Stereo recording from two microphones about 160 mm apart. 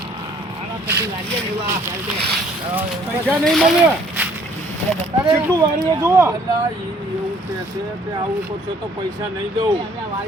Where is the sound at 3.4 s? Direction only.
Centre (ahead or behind).